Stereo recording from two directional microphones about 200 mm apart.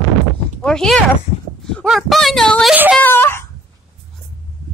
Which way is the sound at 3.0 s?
10° left (ahead or behind).